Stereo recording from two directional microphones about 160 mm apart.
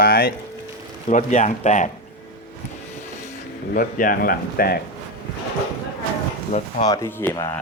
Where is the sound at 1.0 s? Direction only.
50° left (ahead or behind).